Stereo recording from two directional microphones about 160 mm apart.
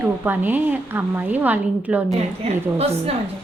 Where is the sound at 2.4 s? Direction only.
40° right (ahead or behind).